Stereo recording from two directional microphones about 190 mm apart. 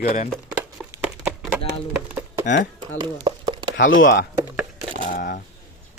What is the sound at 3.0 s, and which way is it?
Chopping, 25° right (ahead or behind).